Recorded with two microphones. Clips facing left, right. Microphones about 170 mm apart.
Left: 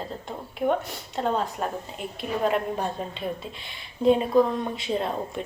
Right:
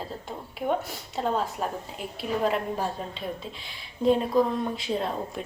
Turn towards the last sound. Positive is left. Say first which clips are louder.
# left 2 dB
turn(degrees=0)  # may be behind; listen again after turning